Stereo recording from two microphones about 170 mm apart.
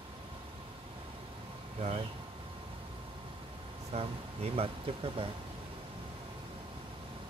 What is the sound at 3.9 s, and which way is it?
Speech, 40° right (ahead or behind).